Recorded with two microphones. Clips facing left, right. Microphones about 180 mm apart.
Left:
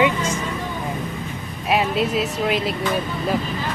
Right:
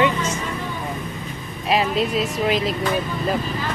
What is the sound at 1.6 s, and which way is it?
Speech, centre (ahead or behind).